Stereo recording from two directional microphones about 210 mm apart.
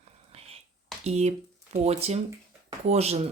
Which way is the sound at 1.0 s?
30° right (ahead or behind).